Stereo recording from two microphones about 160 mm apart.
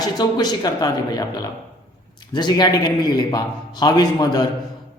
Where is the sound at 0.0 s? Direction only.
25° left (ahead or behind).